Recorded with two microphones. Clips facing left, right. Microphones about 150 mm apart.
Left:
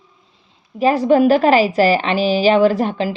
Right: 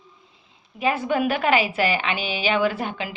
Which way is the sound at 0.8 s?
35° left (ahead or behind).